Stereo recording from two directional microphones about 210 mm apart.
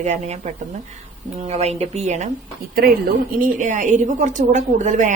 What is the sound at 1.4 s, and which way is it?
Speech, 30° right (ahead or behind).